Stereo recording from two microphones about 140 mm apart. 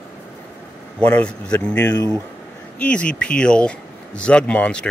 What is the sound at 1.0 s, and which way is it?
Speech, 10° left (ahead or behind).